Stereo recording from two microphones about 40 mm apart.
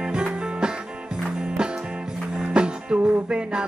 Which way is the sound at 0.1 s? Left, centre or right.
Right.